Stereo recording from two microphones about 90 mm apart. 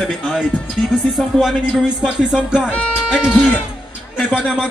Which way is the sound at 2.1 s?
10° right (ahead or behind).